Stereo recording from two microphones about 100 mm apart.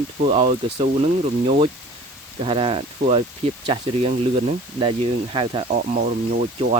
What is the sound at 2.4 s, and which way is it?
Speech, 60° right (ahead or behind).